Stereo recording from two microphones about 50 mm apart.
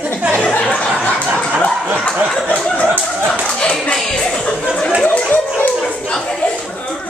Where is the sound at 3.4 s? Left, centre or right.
Centre.